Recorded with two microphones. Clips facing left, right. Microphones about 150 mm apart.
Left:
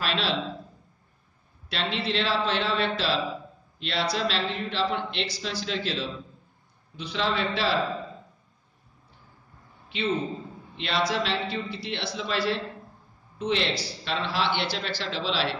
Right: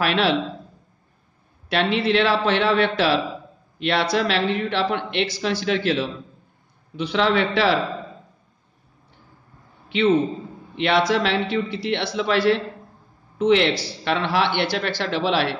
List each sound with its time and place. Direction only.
0.0 s a man's voice: 65° right (ahead or behind)
1.7 s a man's voice: 65° right (ahead or behind)
9.8 s a man's voice: 70° right (ahead or behind)